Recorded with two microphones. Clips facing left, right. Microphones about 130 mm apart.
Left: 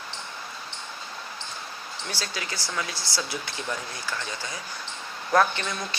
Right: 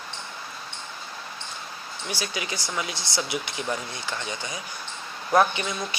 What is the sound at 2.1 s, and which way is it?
Speech, 15° right (ahead or behind).